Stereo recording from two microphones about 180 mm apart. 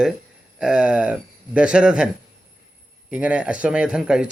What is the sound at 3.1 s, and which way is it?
Speech, 5° right (ahead or behind).